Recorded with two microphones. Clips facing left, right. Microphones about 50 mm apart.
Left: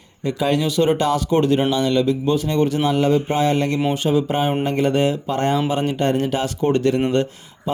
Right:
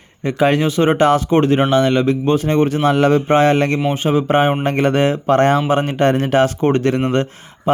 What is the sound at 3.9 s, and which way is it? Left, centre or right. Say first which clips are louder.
A man's voice: right 4 dB; right.